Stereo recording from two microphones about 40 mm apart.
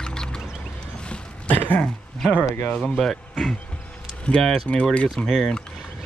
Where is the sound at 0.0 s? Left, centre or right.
Centre.